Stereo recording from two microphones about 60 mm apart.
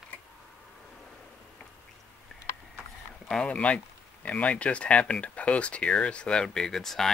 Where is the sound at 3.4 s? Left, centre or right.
Left.